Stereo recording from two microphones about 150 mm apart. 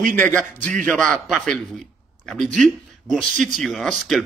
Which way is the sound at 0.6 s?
60° right (ahead or behind).